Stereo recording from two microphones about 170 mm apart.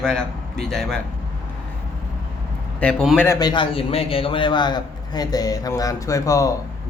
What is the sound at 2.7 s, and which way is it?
Speech, 5° left (ahead or behind).